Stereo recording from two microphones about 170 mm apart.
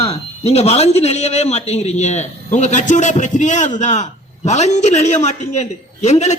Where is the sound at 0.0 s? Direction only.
35° left (ahead or behind).